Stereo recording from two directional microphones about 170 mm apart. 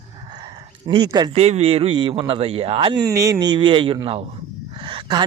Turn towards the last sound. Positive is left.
turn(degrees=-30)  # may be behind; listen again after turning